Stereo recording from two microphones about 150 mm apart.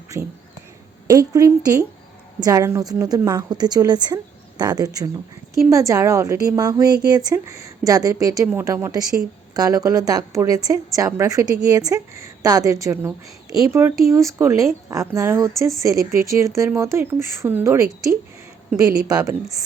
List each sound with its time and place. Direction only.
1.0 s a woman's voice: 25° right (ahead or behind)